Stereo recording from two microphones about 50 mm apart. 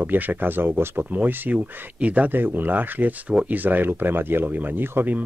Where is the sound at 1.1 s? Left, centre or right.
Right.